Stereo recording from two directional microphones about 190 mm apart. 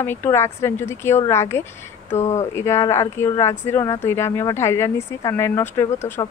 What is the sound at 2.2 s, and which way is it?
Speech, 35° left (ahead or behind).